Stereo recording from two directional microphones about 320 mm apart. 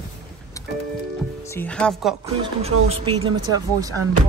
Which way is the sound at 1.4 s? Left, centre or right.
Centre.